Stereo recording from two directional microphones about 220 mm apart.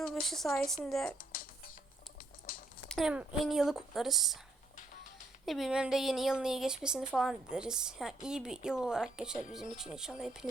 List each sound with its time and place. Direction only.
0.0 s a woman's voice: centre (ahead or behind)
1.2 s music: 40° left (ahead or behind)
2.5 s a sound: 40° left (ahead or behind)
2.9 s speech: 5° right (ahead or behind)
5.5 s speech: centre (ahead or behind)